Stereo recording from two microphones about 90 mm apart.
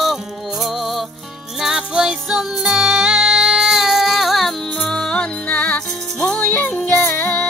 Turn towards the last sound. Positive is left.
turn(degrees=25)  # may be behind; listen again after turning